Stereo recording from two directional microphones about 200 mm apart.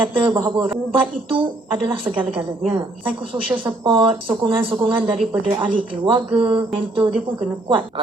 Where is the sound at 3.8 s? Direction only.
25° right (ahead or behind).